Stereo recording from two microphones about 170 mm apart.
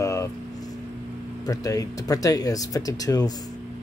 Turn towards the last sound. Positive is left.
turn(degrees=20)  # may be behind; listen again after turning